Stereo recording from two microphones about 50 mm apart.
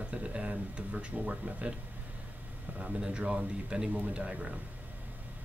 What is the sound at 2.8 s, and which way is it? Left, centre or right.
Speech, right.